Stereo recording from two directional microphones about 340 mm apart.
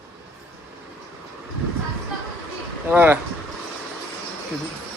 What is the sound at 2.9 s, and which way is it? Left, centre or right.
Speech, centre.